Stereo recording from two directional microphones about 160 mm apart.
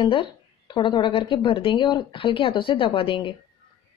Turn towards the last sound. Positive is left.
turn(degrees=35)  # may be behind; listen again after turning